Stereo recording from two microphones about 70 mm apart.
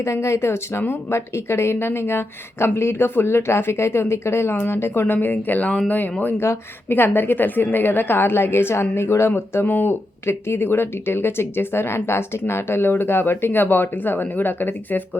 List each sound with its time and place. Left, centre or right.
0.0 s speech: left
6.4 s speech: left
6.9 s speech: left